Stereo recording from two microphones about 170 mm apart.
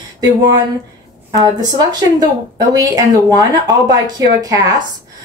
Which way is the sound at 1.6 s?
25° right (ahead or behind).